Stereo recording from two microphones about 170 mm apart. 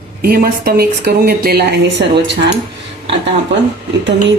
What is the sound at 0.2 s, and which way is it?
Speech, 60° right (ahead or behind).